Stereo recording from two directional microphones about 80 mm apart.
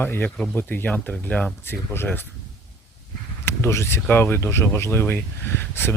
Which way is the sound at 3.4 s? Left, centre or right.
Left.